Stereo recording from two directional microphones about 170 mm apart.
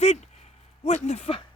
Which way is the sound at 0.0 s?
40° left (ahead or behind).